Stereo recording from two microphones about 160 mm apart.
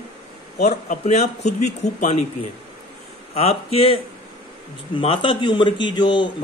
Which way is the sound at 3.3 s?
40° left (ahead or behind).